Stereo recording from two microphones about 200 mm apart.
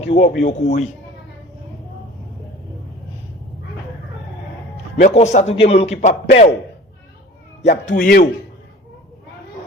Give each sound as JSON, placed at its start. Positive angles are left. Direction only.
{"t": 0.1, "sound": "music", "side_deg": 35}
{"t": 4.9, "sound": "music", "side_deg": 35}
{"t": 7.6, "sound": "music", "side_deg": 35}